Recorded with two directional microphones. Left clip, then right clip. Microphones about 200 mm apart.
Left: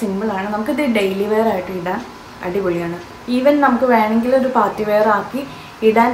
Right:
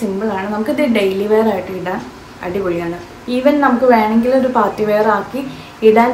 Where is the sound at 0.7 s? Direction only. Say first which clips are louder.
Right 3 dB; 5° left (ahead or behind).